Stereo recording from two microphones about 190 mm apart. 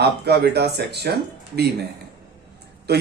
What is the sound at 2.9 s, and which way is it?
Speech, 60° right (ahead or behind).